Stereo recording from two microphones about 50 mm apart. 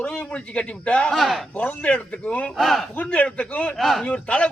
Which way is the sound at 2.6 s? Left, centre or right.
Centre.